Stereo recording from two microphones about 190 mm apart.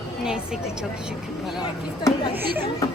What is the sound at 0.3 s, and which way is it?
Speech, 5° right (ahead or behind).